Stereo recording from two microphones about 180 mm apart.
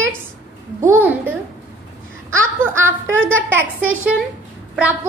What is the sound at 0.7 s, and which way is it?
Music, 15° right (ahead or behind).